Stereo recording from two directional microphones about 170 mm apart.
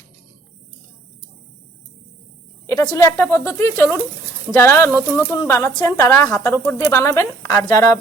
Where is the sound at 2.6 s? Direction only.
20° left (ahead or behind).